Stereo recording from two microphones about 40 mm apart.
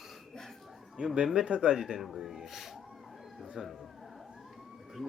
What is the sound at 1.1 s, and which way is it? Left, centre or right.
Speech, centre.